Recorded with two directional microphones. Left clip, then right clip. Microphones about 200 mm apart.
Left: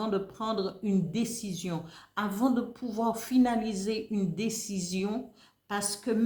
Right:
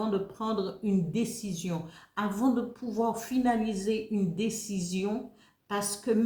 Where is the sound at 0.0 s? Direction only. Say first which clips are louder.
Even; 40° left (ahead or behind).